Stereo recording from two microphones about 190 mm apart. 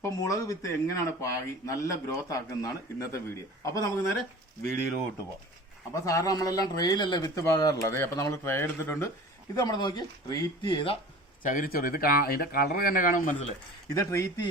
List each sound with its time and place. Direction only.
0.0 s speech: 15° left (ahead or behind)
5.9 s speech: 15° left (ahead or behind)
11.4 s speech: 45° left (ahead or behind)
13.8 s speech: 15° left (ahead or behind)